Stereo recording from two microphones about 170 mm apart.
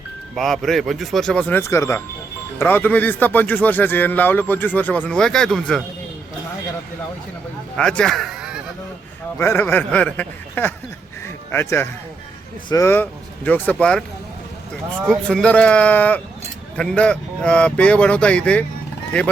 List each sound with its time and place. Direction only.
0.3 s speech: centre (ahead or behind)
7.8 s speech: 5° left (ahead or behind)
9.4 s speech: 15° left (ahead or behind)
15.0 s speech: 5° left (ahead or behind)